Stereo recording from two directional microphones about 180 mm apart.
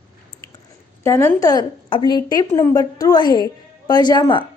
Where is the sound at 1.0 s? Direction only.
15° left (ahead or behind).